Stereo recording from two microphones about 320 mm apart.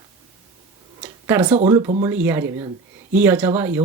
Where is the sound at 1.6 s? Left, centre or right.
Centre.